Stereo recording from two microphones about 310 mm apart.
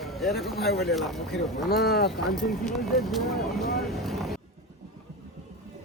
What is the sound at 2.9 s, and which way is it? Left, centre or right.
Speech, centre.